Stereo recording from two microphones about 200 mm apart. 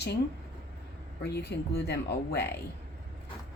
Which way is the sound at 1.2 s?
55° left (ahead or behind).